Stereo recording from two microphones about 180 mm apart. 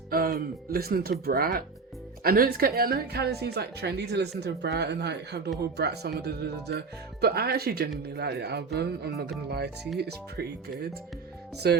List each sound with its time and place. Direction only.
0.1 s speech: 55° right (ahead or behind)